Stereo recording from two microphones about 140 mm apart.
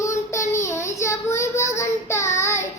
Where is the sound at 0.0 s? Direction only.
20° left (ahead or behind).